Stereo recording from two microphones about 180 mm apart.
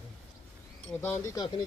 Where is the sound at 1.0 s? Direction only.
15° left (ahead or behind).